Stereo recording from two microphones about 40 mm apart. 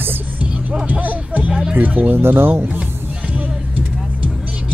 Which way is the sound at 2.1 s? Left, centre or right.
Right.